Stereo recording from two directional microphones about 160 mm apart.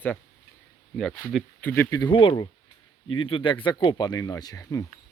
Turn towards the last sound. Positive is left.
turn(degrees=20)  # may be behind; listen again after turning